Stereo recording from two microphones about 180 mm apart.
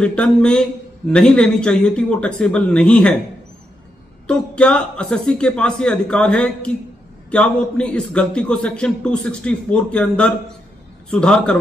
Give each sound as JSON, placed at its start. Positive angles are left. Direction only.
{"t": 0.0, "sound": "a man's voice", "side_deg": 5}
{"t": 4.3, "sound": "a man's voice", "side_deg": 5}